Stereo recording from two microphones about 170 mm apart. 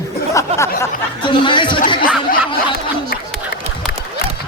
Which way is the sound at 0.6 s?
15° left (ahead or behind).